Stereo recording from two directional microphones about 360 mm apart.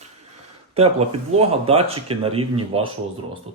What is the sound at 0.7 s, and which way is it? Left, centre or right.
Speech, centre.